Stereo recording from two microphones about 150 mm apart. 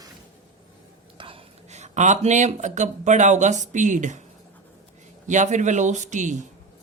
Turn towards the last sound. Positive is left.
turn(degrees=-55)  # may be behind; listen again after turning